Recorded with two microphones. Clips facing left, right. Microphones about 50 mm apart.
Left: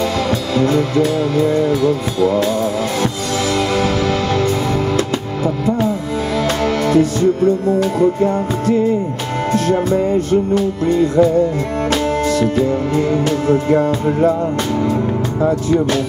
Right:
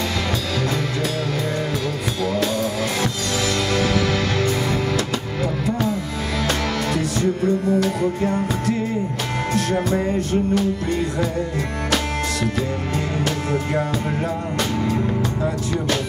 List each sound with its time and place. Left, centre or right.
0.6 s music: left
6.9 s music: left
11.9 s music: left
15.4 s speech: left